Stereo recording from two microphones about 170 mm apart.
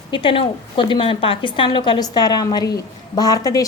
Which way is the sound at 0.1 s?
30° left (ahead or behind).